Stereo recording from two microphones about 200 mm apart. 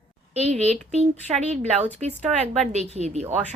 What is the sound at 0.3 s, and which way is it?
Speech, 30° right (ahead or behind).